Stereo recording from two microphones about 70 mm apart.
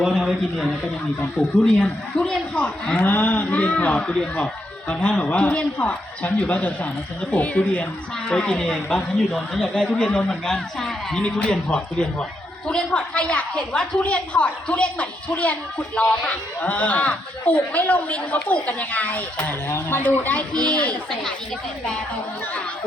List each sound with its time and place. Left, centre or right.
0.1 s a sound: centre
1.4 s speech: left
1.8 s speech: centre
3.0 s speech: left
20.5 s speech: centre